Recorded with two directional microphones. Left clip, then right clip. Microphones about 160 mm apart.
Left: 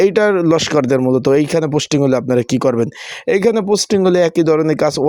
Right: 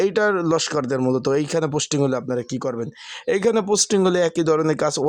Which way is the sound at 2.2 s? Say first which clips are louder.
Left 10 dB; 45° left (ahead or behind).